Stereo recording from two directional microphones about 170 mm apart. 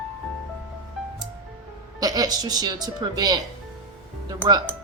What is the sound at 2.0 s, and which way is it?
A woman's voice, 25° right (ahead or behind).